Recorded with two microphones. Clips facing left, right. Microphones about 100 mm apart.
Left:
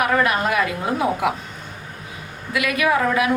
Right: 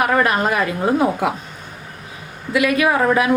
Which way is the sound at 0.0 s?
35° right (ahead or behind).